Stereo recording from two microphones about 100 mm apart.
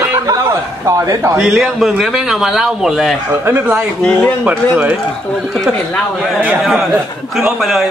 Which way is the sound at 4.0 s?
15° left (ahead or behind).